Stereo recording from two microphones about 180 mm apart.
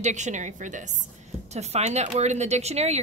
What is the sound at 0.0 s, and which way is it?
A woman's voice, 40° right (ahead or behind).